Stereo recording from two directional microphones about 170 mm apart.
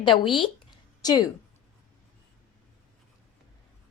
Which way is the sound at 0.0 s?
30° left (ahead or behind).